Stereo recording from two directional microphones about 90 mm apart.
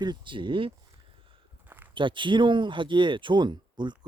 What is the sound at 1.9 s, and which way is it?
Speech, 65° right (ahead or behind).